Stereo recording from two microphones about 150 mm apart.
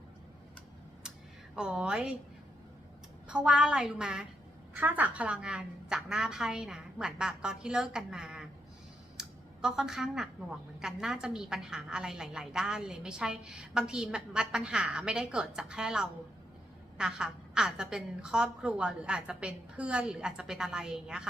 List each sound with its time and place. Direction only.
1.5 s a woman's voice: 5° right (ahead or behind)
3.2 s a woman's voice: 5° right (ahead or behind)
9.1 s a sound: 5° right (ahead or behind)
10.8 s a woman's voice: 5° right (ahead or behind)